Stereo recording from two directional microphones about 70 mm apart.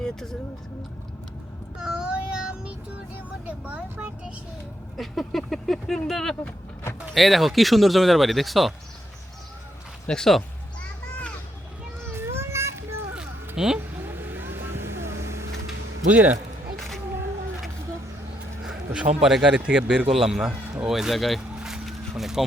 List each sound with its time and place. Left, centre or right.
0.0 s speech: centre
1.8 s child singing: centre
3.4 s a man's voice: centre
4.9 s speech: centre
10.1 s speech: centre
12.1 s children playing: right
13.7 s vehicle: right
16.0 s speech: right
16.7 s a sound: centre
18.9 s a man's voice: centre
21.5 s vehicle: centre